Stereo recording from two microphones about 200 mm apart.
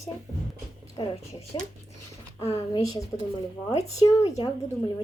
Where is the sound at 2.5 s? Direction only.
30° left (ahead or behind).